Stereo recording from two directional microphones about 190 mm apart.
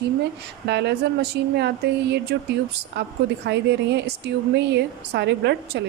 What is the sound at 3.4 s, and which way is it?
Speech, 65° right (ahead or behind).